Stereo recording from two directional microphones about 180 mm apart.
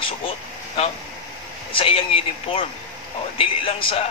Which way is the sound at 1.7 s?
30° left (ahead or behind).